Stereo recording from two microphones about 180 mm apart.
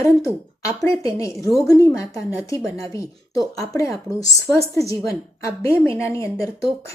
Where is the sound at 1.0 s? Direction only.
15° left (ahead or behind).